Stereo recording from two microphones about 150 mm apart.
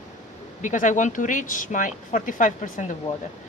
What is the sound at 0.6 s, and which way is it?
Speech, 55° left (ahead or behind).